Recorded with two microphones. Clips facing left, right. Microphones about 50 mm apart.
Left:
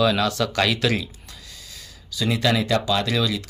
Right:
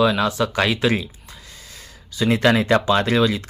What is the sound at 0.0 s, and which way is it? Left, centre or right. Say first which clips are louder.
Speech: right 2 dB; right.